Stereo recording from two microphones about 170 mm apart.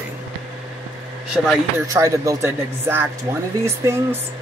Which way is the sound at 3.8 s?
20° right (ahead or behind).